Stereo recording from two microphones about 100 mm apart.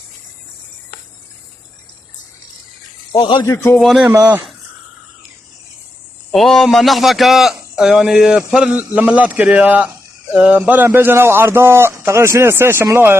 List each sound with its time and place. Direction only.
3.1 s speech: 50° left (ahead or behind)
3.4 s a man's voice: 30° left (ahead or behind)
3.8 s a man's voice: centre (ahead or behind)
6.3 s a man's voice: 5° left (ahead or behind); by 13.1 s 25° right (ahead or behind)